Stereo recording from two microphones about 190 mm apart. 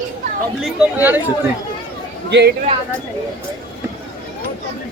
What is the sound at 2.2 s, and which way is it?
Speech, 65° right (ahead or behind).